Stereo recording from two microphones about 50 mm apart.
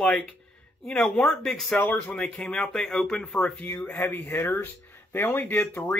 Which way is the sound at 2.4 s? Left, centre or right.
Centre.